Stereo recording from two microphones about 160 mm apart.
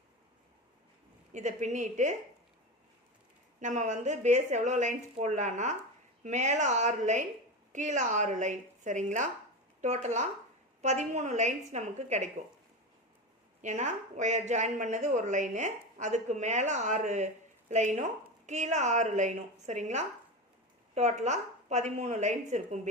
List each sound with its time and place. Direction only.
1.3 s speech: 50° right (ahead or behind)
3.6 s speech: 50° right (ahead or behind)
13.6 s speech: 50° right (ahead or behind)